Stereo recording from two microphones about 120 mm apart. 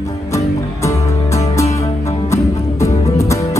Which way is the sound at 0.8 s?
25° left (ahead or behind).